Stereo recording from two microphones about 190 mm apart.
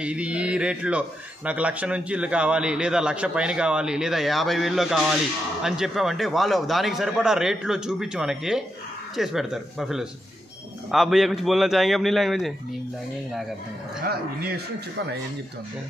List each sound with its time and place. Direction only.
0.0 s speech: 5° right (ahead or behind)
14.0 s speech: 55° right (ahead or behind)